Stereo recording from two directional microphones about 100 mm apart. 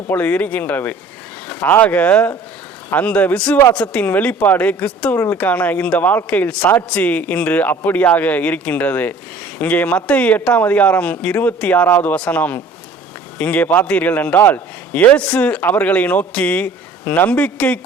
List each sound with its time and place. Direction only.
0.1 s speech: 15° left (ahead or behind)
12.1 s speech: 10° left (ahead or behind)